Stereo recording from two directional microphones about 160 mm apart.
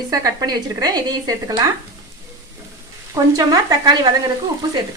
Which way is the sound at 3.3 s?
25° right (ahead or behind).